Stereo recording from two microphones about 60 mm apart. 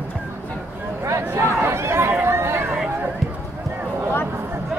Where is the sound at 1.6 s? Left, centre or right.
Right.